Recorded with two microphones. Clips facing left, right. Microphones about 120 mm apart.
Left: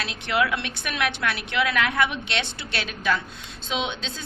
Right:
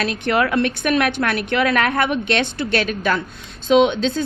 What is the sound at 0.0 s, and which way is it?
A woman's voice, 50° right (ahead or behind).